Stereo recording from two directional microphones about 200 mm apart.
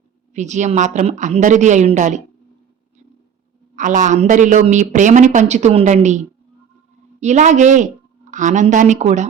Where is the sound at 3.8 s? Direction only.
40° right (ahead or behind).